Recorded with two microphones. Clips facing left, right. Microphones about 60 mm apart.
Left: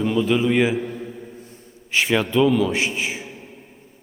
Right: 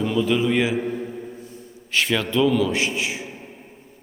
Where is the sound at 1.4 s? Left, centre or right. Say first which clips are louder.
Right 4 dB; left.